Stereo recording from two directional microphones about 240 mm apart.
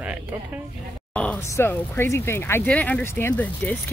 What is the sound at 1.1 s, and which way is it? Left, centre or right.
Speech, centre.